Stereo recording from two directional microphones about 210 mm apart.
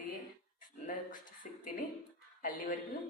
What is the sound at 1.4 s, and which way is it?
Speech, 40° left (ahead or behind).